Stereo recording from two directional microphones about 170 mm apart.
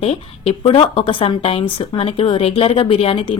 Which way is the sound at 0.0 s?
35° left (ahead or behind).